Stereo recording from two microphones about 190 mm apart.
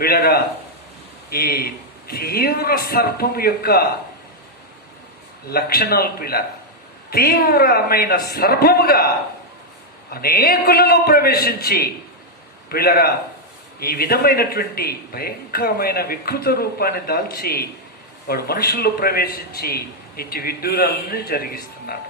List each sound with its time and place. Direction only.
0.0 s speech: 55° left (ahead or behind)
5.5 s speech: 55° left (ahead or behind)
10.1 s speech: 50° left (ahead or behind)